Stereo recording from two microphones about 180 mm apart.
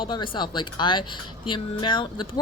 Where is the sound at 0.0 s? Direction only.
25° left (ahead or behind).